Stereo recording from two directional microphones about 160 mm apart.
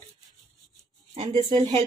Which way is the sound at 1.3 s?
30° right (ahead or behind).